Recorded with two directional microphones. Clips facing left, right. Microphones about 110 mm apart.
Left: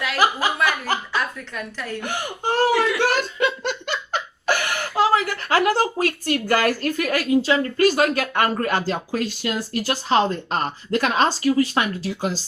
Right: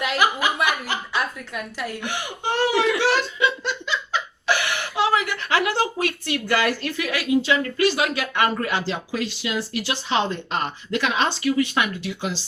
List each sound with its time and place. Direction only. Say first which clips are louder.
0.2 s speech: left 2 dB; 35° left (ahead or behind)
0.9 s a sound: left 4 dB; 40° left (ahead or behind)
1.5 s speech: even; 10° right (ahead or behind)
2.0 s speech: left 2 dB; 45° left (ahead or behind)